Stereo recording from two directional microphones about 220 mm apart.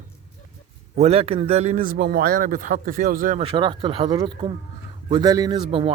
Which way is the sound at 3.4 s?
25° right (ahead or behind).